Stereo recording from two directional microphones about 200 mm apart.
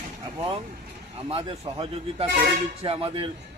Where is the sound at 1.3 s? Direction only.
30° right (ahead or behind).